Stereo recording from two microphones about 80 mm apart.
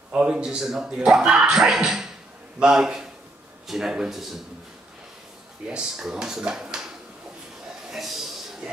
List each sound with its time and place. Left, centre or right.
0.1 s speech: centre
5.7 s speech: centre
7.9 s a sound: centre